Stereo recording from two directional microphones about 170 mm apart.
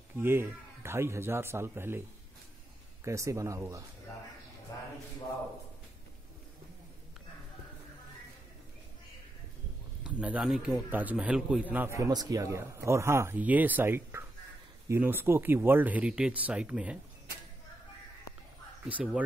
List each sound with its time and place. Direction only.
0.2 s a man's voice: 15° right (ahead or behind)
10.0 s a man's voice: 5° right (ahead or behind)
18.9 s a man's voice: 10° right (ahead or behind)